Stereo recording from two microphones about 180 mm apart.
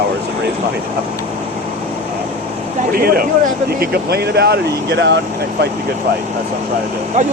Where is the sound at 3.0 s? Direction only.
55° right (ahead or behind); by 5.2 s 75° right (ahead or behind).